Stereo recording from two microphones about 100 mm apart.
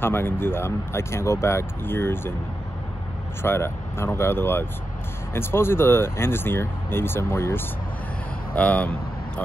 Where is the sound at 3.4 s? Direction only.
25° left (ahead or behind).